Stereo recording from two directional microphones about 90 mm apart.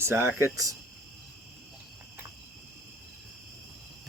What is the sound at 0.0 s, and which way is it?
Speech, 30° right (ahead or behind).